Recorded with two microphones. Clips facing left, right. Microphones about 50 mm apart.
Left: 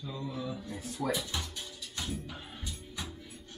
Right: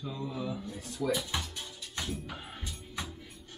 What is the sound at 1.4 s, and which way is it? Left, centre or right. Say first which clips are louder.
Music: right 1 dB; centre.